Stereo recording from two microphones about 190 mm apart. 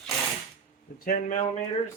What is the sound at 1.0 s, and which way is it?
Speech, 45° left (ahead or behind).